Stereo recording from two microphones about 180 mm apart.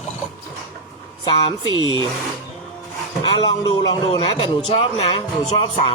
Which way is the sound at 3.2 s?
20° left (ahead or behind).